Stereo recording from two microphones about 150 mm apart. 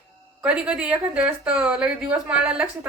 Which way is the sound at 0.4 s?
5° right (ahead or behind).